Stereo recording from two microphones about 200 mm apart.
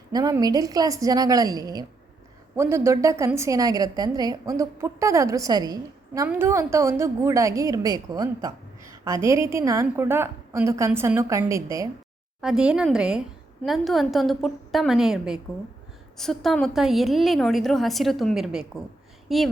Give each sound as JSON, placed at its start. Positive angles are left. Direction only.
{"t": 0.1, "sound": "a woman's voice", "side_deg": -20}
{"t": 12.4, "sound": "a woman's voice", "side_deg": -5}